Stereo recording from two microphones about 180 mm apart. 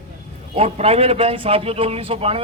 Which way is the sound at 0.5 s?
35° right (ahead or behind).